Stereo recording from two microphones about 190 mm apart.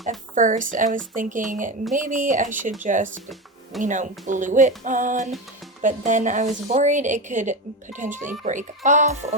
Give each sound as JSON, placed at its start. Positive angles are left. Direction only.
{"t": 0.3, "sound": "a woman's voice", "side_deg": -45}